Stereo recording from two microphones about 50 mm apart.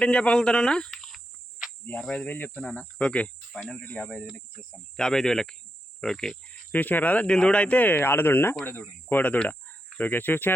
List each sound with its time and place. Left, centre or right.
0.0 s speech: left
0.9 s cricket: centre
2.0 s speech: centre
2.2 s speech: left
2.6 s speech: left
3.5 s speech: centre
4.9 s speech: centre
6.7 s speech: left
7.3 s speech: centre; by 9.4 s left
9.5 s cricket: left